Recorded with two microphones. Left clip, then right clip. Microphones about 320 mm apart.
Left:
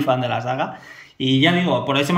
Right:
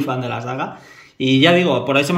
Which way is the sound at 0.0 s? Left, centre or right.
Centre.